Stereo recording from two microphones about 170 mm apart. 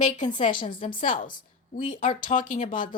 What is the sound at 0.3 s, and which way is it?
Speech, 55° left (ahead or behind).